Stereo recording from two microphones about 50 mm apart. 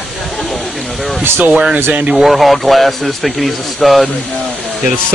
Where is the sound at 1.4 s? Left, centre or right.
Right.